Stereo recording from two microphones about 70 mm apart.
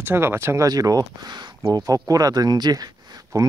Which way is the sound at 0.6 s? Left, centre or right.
Right.